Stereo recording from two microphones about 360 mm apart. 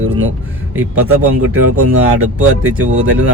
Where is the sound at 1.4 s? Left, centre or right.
Right.